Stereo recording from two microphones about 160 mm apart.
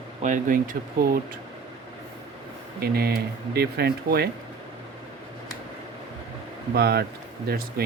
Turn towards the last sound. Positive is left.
turn(degrees=-65)  # may be behind; listen again after turning